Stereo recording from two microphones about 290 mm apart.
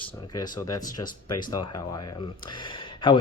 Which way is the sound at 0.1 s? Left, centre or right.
Centre.